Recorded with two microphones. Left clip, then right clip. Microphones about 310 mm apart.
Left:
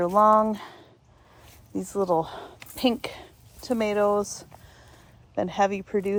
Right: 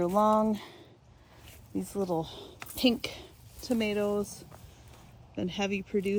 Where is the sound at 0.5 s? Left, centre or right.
Centre.